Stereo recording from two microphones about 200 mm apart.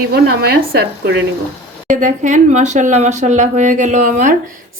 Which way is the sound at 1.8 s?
40° right (ahead or behind).